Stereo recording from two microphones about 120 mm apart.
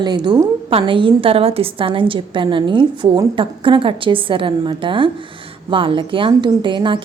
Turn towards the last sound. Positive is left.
turn(degrees=-40)  # may be behind; listen again after turning